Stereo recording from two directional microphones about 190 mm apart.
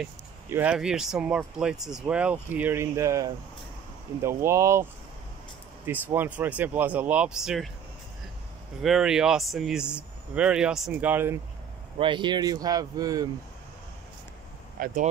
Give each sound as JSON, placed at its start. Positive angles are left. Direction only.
{"t": 0.5, "sound": "speech", "side_deg": -10}
{"t": 5.9, "sound": "speech", "side_deg": -10}
{"t": 8.8, "sound": "speech", "side_deg": 0}
{"t": 12.0, "sound": "speech", "side_deg": -25}
{"t": 14.8, "sound": "speech", "side_deg": -45}